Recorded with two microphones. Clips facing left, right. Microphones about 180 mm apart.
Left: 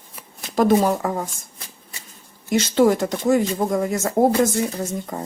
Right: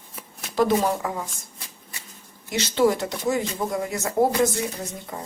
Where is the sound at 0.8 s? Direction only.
50° left (ahead or behind).